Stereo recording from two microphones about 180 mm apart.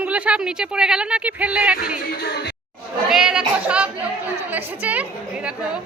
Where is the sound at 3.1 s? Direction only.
5° right (ahead or behind).